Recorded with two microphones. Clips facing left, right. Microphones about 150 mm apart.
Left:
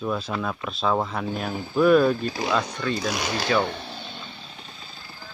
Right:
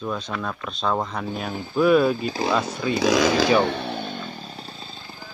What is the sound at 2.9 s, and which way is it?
Chainsaw, 90° right.